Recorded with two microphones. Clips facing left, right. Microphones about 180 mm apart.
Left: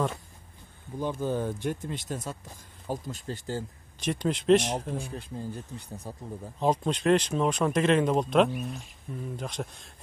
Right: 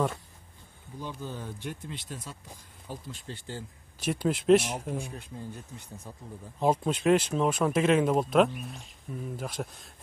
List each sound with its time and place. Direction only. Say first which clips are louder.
0.9 s speech: left 9 dB; 50° left (ahead or behind)
4.0 s speech: even; 5° right (ahead or behind)
5.1 s speech: left 4 dB; 30° left (ahead or behind)
6.6 s speech: even; 10° right (ahead or behind)